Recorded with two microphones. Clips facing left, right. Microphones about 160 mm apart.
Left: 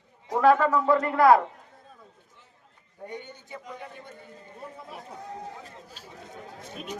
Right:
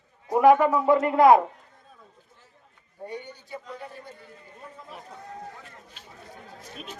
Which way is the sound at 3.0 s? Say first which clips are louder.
Right 2 dB; 20° left (ahead or behind).